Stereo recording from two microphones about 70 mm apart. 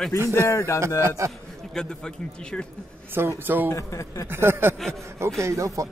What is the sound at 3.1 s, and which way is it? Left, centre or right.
Speech, right.